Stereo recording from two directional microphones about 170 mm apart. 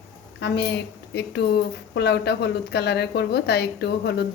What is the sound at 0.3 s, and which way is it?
A woman's voice, 90° left.